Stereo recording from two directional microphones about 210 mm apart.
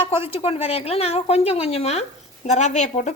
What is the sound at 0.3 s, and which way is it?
A woman's voice, 25° left (ahead or behind).